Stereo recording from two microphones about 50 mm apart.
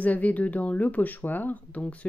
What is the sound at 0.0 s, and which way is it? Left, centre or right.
Speech, left.